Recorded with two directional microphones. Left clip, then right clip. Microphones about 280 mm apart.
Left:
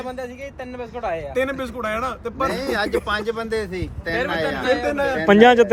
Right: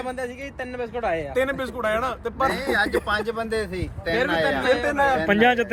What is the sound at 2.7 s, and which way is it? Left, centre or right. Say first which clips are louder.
Speech: even; left.